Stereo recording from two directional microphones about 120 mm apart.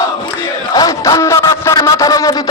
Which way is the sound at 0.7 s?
30° left (ahead or behind).